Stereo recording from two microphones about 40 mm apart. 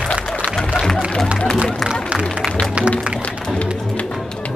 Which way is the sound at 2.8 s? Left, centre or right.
Right.